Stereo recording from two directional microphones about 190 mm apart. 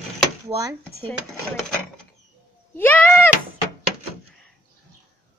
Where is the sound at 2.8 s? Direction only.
10° left (ahead or behind).